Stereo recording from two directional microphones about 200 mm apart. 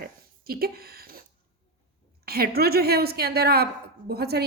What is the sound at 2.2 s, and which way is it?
A woman's voice, 50° right (ahead or behind).